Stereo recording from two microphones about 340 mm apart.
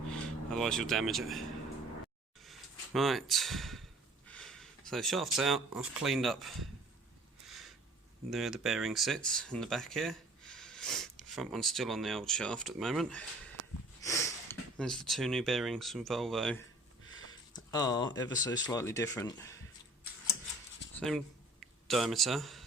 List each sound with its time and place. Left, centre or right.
0.1 s speech: centre
2.4 s a sound: centre
4.3 s speech: centre
7.4 s a sound: centre
8.3 s speech: centre
13.6 s snort: right
14.0 s speech: centre
17.2 s speech: centre
21.8 s speech: centre